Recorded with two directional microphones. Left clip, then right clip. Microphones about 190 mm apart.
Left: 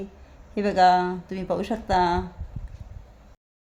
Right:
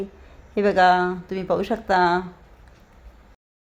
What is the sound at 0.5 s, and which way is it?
A man's voice, 10° right (ahead or behind).